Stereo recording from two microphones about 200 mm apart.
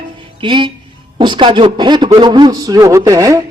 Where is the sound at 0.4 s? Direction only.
25° right (ahead or behind).